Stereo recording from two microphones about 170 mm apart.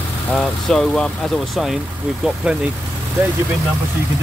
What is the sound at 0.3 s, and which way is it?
Speech, 5° left (ahead or behind).